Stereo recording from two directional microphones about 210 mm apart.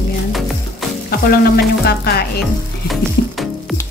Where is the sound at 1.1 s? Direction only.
45° left (ahead or behind).